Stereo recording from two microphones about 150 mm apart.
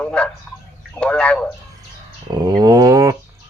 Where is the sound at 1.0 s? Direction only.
5° left (ahead or behind).